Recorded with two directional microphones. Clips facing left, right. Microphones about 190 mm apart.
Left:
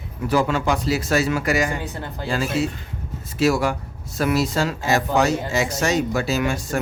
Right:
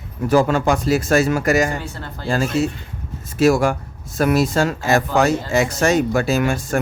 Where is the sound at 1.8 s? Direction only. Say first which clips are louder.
Left 2 dB; 15° left (ahead or behind).